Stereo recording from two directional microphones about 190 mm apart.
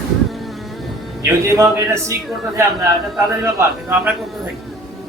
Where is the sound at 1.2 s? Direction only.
15° right (ahead or behind).